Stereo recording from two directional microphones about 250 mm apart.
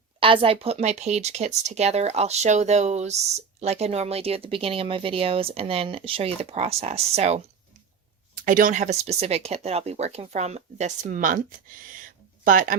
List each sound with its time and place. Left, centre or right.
0.2 s speech: right
8.4 s speech: right
11.9 s a sound: right